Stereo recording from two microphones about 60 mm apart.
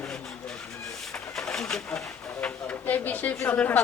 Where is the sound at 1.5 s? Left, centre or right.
Centre.